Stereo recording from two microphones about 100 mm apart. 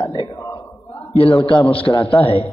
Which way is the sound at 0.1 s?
45° left (ahead or behind).